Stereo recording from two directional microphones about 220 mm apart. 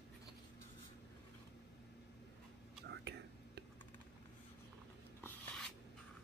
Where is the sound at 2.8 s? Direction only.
50° right (ahead or behind).